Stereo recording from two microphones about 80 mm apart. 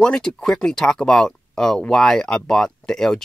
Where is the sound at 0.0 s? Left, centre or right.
Centre.